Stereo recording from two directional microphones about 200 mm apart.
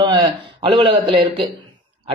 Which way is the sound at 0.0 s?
25° right (ahead or behind).